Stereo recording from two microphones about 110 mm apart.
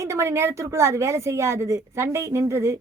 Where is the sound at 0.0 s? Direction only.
25° right (ahead or behind).